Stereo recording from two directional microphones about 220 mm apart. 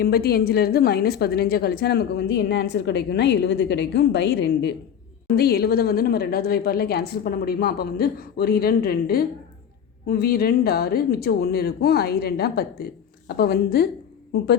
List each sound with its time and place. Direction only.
0.0 s a woman's voice: 45° left (ahead or behind)